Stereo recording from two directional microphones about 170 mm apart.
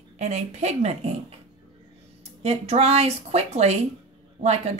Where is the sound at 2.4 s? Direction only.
40° right (ahead or behind).